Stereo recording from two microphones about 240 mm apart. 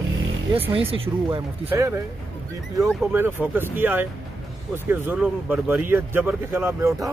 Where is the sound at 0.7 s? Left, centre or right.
Right.